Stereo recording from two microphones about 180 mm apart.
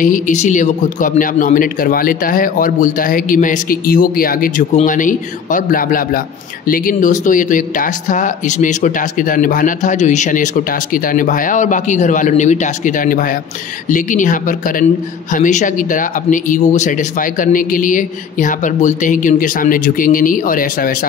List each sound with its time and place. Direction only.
0.0 s a man's voice: 45° left (ahead or behind)